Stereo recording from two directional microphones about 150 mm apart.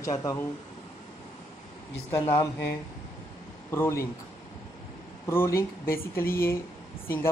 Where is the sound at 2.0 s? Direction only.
20° left (ahead or behind).